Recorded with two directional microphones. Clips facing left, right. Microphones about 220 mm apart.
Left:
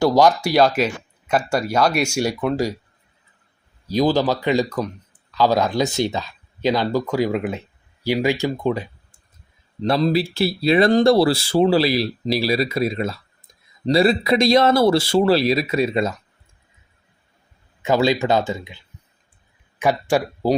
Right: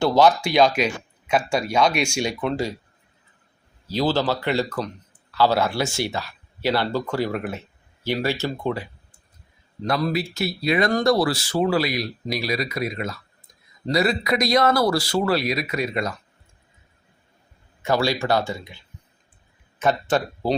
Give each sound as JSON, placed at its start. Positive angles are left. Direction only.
{"t": 0.0, "sound": "speech", "side_deg": 10}
{"t": 3.8, "sound": "speech", "side_deg": 15}
{"t": 9.8, "sound": "speech", "side_deg": 30}
{"t": 17.8, "sound": "speech", "side_deg": 20}
{"t": 19.8, "sound": "speech", "side_deg": 10}